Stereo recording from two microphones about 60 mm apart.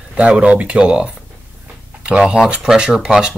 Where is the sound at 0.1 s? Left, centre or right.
Centre.